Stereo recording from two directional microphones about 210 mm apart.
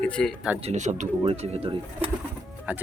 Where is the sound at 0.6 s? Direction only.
35° right (ahead or behind).